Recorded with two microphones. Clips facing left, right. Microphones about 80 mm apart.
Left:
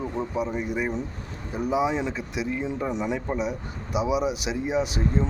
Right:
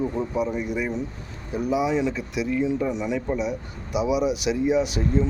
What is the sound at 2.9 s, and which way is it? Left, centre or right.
Speech, left.